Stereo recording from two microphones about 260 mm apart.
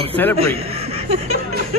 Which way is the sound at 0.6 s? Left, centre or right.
Right.